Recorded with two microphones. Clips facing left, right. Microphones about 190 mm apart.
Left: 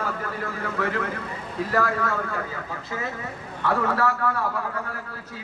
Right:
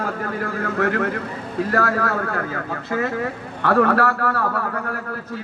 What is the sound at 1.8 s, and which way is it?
Speech, 70° right (ahead or behind).